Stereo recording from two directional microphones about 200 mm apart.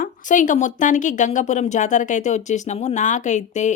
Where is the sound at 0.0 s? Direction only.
40° left (ahead or behind).